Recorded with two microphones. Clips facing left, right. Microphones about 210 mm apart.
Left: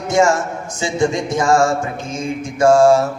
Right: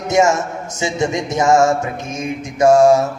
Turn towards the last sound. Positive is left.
turn(degrees=-20)  # may be behind; listen again after turning